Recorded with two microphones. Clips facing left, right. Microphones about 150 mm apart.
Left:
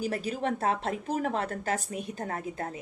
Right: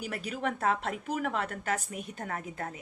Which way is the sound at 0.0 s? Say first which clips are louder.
Left 4 dB; 35° left (ahead or behind).